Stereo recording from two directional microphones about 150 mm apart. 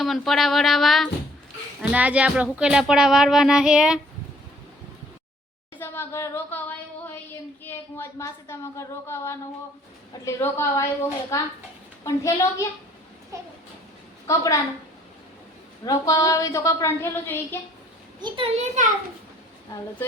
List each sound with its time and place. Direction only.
0.0 s speech: centre (ahead or behind)
5.7 s a sound: 15° left (ahead or behind)
7.6 s a woman's voice: 15° left (ahead or behind)
14.3 s a woman's voice: 25° left (ahead or behind)
15.9 s a woman's voice: 25° left (ahead or behind)
18.2 s a child's voice: 35° right (ahead or behind); by 18.9 s 50° right (ahead or behind)